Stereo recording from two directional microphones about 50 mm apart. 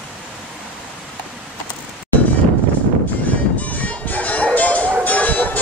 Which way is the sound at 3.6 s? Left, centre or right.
Left.